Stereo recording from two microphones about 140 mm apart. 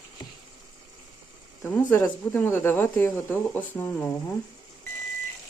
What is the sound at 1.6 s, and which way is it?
Speech, 15° left (ahead or behind).